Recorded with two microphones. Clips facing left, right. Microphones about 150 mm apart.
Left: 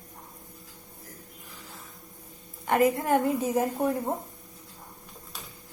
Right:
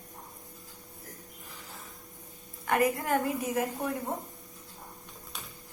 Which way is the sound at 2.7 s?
25° left (ahead or behind).